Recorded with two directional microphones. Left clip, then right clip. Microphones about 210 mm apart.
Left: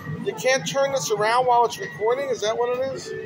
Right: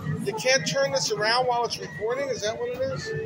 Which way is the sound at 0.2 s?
15° left (ahead or behind).